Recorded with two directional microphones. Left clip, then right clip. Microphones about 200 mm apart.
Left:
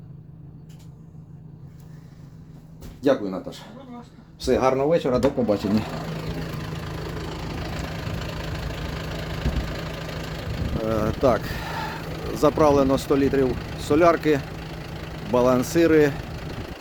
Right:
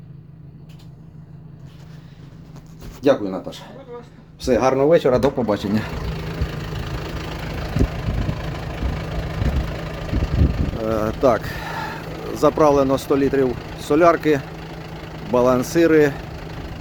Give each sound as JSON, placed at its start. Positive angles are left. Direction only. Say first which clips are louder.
{"t": 3.0, "sound": "speech", "louder": "right 4 dB", "side_deg": -5}
{"t": 4.8, "sound": "speech", "louder": "right 5 dB", "side_deg": -20}
{"t": 6.5, "sound": "vehicle", "louder": "right 3 dB", "side_deg": -50}
{"t": 7.7, "sound": "vehicle", "louder": "right 6 dB", "side_deg": -5}
{"t": 11.4, "sound": "vehicle", "louder": "right 2 dB", "side_deg": -5}
{"t": 12.0, "sound": "vehicle", "louder": "right 2 dB", "side_deg": 10}
{"t": 12.4, "sound": "speech", "louder": "right 3 dB", "side_deg": -5}
{"t": 13.5, "sound": "speech", "louder": "right 2 dB", "side_deg": 5}
{"t": 13.7, "sound": "speech", "louder": "right 3 dB", "side_deg": -5}
{"t": 14.4, "sound": "vehicle", "louder": "right 2 dB", "side_deg": 10}
{"t": 15.4, "sound": "speech", "louder": "right 3 dB", "side_deg": -5}
{"t": 16.1, "sound": "vehicle", "louder": "right 2 dB", "side_deg": 5}